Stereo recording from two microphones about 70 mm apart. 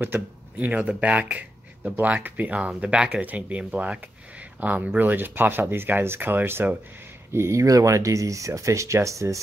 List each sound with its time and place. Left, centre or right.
0.0 s speech: right
7.3 s speech: right